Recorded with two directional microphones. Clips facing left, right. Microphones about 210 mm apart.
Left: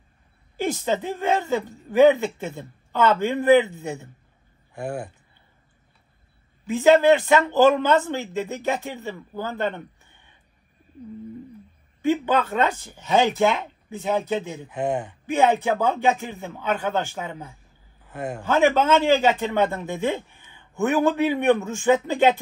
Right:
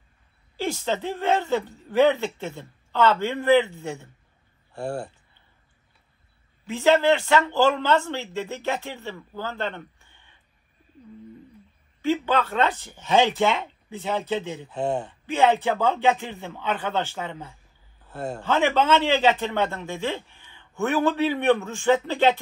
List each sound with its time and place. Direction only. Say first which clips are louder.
0.6 s a woman's voice: left 2 dB; 15° left (ahead or behind)
6.7 s a woman's voice: left 4 dB; 15° left (ahead or behind)
12.0 s a woman's voice: left 2 dB; 15° left (ahead or behind)